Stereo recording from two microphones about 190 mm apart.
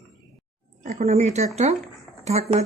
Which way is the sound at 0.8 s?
40° right (ahead or behind).